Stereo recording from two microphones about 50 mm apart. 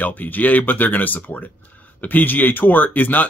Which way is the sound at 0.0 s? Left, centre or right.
Left.